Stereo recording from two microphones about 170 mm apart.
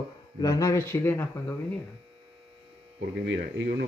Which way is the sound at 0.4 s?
20° left (ahead or behind).